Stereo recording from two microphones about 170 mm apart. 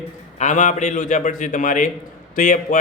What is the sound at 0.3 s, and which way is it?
A man's voice, 45° left (ahead or behind).